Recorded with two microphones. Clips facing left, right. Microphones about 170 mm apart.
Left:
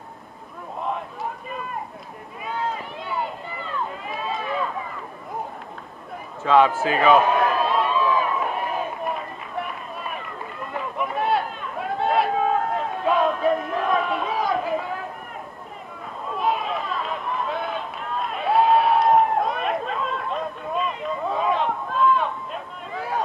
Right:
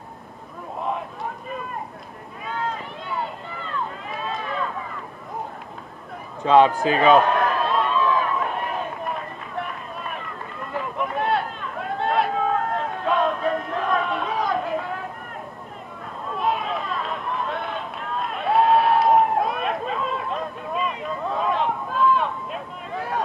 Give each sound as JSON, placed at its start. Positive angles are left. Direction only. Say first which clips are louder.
{"t": 6.4, "sound": "a man's voice", "louder": "right 2 dB", "side_deg": -20}
{"t": 7.2, "sound": "run", "louder": "even", "side_deg": 0}
{"t": 10.7, "sound": "run", "louder": "right 1 dB", "side_deg": 0}
{"t": 12.0, "sound": "a sound", "louder": "left 1 dB", "side_deg": 0}
{"t": 16.3, "sound": "run", "louder": "even", "side_deg": 0}